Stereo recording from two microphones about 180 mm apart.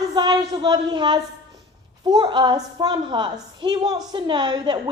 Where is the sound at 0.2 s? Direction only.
20° right (ahead or behind).